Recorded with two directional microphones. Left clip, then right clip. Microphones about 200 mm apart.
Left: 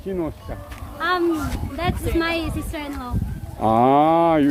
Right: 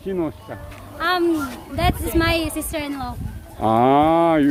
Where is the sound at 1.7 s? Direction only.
60° right (ahead or behind).